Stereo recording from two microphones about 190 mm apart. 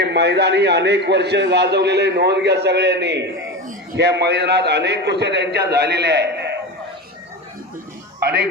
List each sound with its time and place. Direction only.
0.0 s a man's voice: 60° right (ahead or behind)